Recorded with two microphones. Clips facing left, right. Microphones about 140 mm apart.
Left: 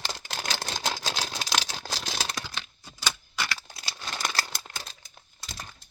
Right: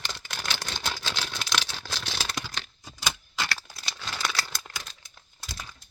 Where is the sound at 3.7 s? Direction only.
15° left (ahead or behind).